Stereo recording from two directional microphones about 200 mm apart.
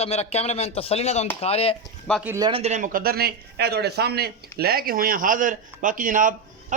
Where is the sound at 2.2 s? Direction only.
10° right (ahead or behind).